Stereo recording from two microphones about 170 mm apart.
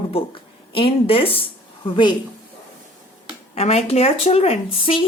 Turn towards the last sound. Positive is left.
turn(degrees=35)  # may be behind; listen again after turning